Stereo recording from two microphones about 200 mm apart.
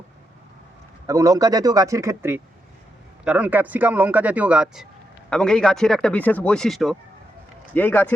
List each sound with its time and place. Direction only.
1.0 s speech: 15° right (ahead or behind); by 8.1 s 10° left (ahead or behind)